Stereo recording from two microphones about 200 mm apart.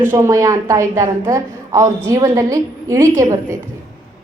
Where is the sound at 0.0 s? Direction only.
15° right (ahead or behind).